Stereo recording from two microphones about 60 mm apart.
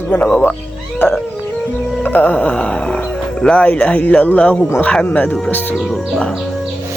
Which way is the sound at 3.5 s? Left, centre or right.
Left.